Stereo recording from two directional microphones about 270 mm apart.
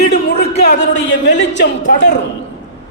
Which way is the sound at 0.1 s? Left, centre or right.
Left.